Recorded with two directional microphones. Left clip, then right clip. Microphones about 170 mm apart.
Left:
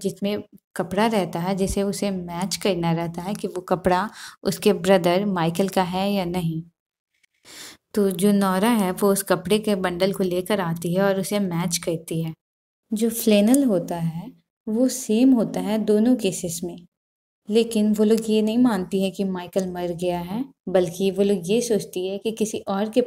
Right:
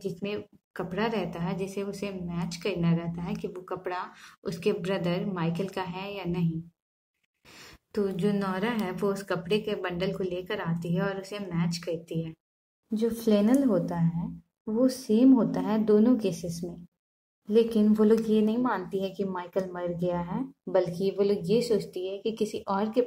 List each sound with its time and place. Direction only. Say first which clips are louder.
0.0 s a woman's voice: left 7 dB; 40° left (ahead or behind)
12.9 s a woman's voice: left 6 dB; 40° left (ahead or behind)
15.3 s speech: left 3 dB; 30° left (ahead or behind)
17.5 s a woman's voice: left 3 dB; 30° left (ahead or behind)